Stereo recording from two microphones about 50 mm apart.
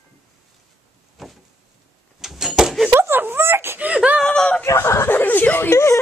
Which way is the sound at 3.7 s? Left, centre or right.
Right.